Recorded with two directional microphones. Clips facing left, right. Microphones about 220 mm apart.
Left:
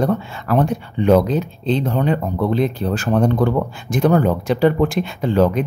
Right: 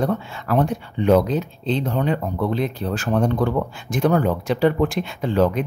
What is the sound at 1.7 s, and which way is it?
Speech, 45° left (ahead or behind).